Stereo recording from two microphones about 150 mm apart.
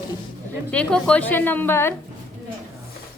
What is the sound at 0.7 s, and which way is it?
A woman's voice, 5° left (ahead or behind).